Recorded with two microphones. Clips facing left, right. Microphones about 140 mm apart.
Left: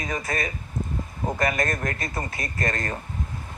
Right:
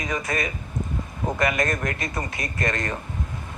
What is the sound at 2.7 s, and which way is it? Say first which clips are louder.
Speech: right 1 dB; 40° left (ahead or behind).